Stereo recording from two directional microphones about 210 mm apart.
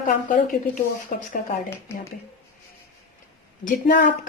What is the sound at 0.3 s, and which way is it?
A woman's voice, 40° left (ahead or behind).